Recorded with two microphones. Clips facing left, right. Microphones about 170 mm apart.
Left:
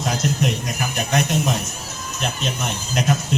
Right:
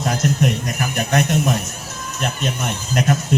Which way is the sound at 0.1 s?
55° right (ahead or behind).